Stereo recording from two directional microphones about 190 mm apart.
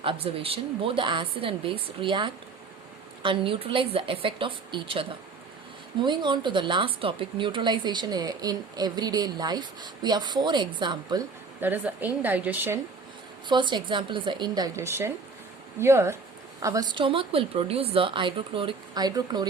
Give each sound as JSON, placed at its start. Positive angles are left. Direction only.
{"t": 0.0, "sound": "speech", "side_deg": -30}
{"t": 11.6, "sound": "a woman's voice", "side_deg": -10}
{"t": 13.5, "sound": "a woman's voice", "side_deg": -25}